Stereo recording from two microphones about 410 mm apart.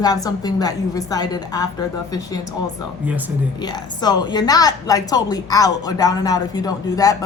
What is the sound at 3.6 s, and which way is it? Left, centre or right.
A woman's voice, centre.